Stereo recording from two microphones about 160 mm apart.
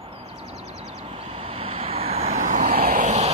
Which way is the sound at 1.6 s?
35° right (ahead or behind).